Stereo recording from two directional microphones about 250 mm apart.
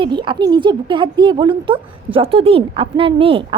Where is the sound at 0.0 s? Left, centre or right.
Centre.